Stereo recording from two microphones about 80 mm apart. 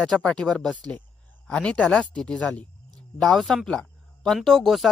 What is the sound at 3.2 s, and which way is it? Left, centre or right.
Speech, centre.